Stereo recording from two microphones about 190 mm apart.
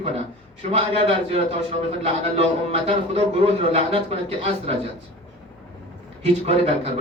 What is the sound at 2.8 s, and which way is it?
A man's voice, 30° right (ahead or behind).